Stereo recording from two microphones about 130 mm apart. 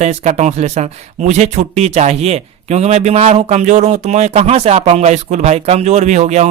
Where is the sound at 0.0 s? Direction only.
55° right (ahead or behind).